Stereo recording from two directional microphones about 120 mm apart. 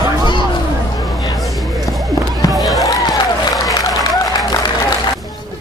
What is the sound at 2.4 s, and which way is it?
Fireworks, 30° left (ahead or behind).